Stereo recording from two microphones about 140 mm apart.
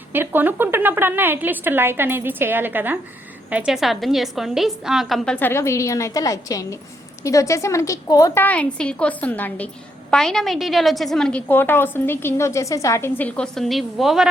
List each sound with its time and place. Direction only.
0.1 s a woman's voice: 15° right (ahead or behind); by 8.4 s 25° left (ahead or behind)
8.4 s a woman's voice: 10° left (ahead or behind)